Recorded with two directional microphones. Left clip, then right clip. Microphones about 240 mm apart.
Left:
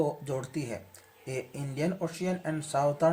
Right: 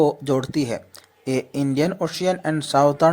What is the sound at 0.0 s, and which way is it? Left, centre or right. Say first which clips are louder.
Speech: right 12 dB; right.